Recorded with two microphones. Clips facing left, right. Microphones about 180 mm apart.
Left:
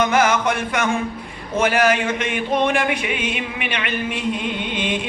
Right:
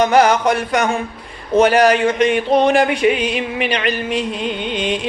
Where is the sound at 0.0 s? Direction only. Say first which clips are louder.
Right 5 dB; 35° right (ahead or behind).